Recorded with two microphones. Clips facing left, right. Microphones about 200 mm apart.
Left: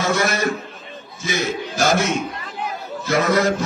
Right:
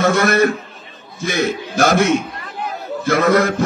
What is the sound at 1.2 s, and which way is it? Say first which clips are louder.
A man's voice: right 4 dB; 60° right (ahead or behind).